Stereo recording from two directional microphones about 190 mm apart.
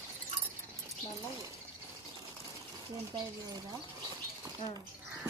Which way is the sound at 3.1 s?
20° right (ahead or behind).